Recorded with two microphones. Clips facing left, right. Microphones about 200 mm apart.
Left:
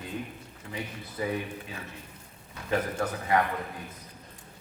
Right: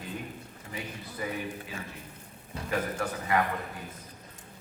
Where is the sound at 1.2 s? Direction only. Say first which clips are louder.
Left 4 dB; 25° left (ahead or behind).